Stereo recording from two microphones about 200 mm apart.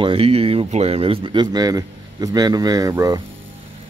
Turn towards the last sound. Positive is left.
turn(degrees=-15)  # may be behind; listen again after turning